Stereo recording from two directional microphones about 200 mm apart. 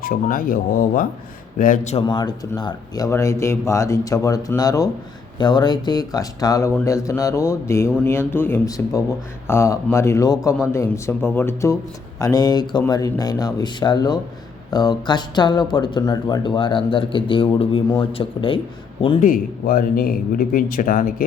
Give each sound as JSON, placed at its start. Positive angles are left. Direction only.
{"t": 0.0, "sound": "a man's voice", "side_deg": 45}
{"t": 2.0, "sound": "speech", "side_deg": 20}
{"t": 19.2, "sound": "a man's voice", "side_deg": 45}